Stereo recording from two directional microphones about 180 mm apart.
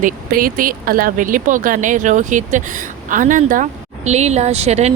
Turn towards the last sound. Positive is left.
turn(degrees=-35)  # may be behind; listen again after turning